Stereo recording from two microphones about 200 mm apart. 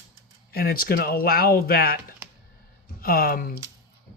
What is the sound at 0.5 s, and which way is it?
Speech, 50° left (ahead or behind).